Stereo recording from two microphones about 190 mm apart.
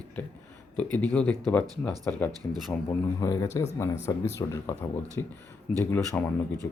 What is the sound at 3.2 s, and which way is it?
Speech, 15° left (ahead or behind).